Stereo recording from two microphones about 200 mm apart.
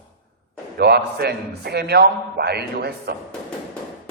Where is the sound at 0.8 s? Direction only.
55° right (ahead or behind).